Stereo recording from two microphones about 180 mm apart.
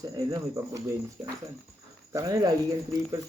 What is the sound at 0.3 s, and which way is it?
Speech, 20° right (ahead or behind).